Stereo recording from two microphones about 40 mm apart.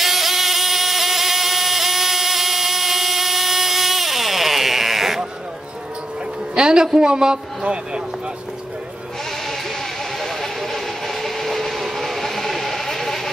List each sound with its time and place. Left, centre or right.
0.0 s a sound: centre
6.5 s a man's voice: right
10.1 s vehicle: centre